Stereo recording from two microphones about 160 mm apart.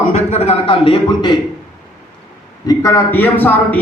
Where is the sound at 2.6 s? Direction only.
20° left (ahead or behind).